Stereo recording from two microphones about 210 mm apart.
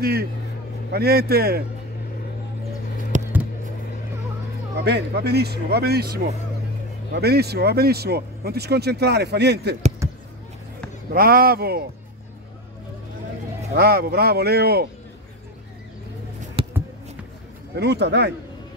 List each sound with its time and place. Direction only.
0.0 s speech: 50° right (ahead or behind)
3.1 s a sound: 35° right (ahead or behind)
4.8 s speech: 50° right (ahead or behind)
10.0 s basketball bounce: 15° right (ahead or behind)
11.1 s speech: 45° right (ahead or behind)
13.7 s speech: 45° right (ahead or behind)
16.6 s a sound: 30° right (ahead or behind)
17.7 s speech: 50° right (ahead or behind)